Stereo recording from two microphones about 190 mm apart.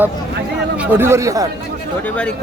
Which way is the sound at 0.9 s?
10° right (ahead or behind).